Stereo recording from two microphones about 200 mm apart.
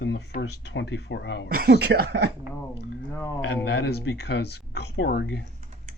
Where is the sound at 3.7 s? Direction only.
55° left (ahead or behind).